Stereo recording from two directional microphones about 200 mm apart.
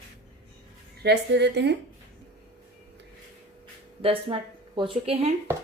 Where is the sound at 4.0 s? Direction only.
25° right (ahead or behind).